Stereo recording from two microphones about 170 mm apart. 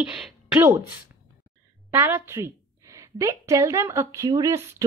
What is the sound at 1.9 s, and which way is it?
Speech, 10° right (ahead or behind).